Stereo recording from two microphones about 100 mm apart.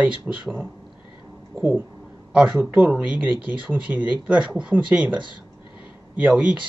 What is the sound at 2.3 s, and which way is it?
A man's voice, 5° right (ahead or behind).